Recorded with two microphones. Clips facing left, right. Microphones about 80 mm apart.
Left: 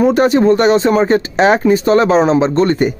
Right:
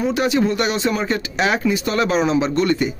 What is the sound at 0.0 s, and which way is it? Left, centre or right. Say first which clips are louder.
A man's voice: left 8 dB; left.